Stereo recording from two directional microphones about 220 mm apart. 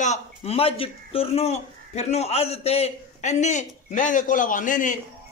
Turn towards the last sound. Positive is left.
turn(degrees=35)  # may be behind; listen again after turning